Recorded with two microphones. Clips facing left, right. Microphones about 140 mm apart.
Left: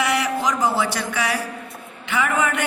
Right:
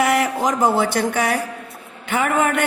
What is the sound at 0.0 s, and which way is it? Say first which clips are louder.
Speech: right 3 dB; 50° right (ahead or behind).